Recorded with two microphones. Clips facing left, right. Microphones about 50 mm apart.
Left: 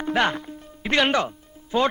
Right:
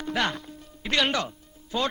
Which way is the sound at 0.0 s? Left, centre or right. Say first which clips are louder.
Left 5 dB; left.